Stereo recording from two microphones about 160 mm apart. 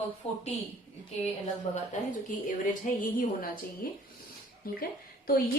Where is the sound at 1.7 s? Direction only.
40° left (ahead or behind).